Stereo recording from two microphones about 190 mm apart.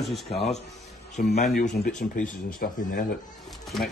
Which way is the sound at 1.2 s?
55° left (ahead or behind).